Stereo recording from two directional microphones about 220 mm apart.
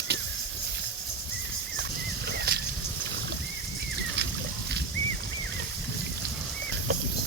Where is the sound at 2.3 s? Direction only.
50° right (ahead or behind).